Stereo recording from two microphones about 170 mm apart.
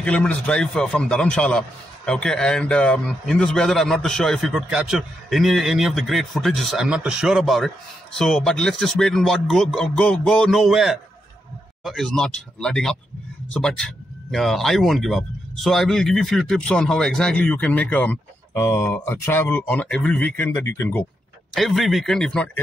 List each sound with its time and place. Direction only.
0.0 s a man's voice: 5° left (ahead or behind)
21.5 s a man's voice: centre (ahead or behind)